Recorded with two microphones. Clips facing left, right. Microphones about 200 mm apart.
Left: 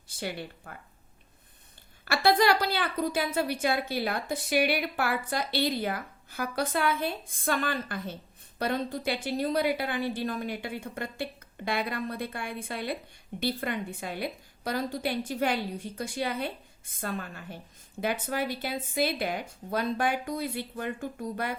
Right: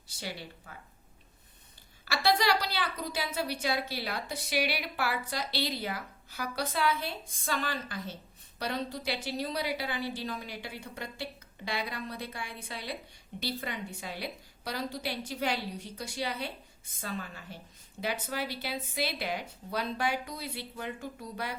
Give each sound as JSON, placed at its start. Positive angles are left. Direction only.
{"t": 0.1, "sound": "a woman's voice", "side_deg": 55}
{"t": 2.0, "sound": "a woman's voice", "side_deg": 55}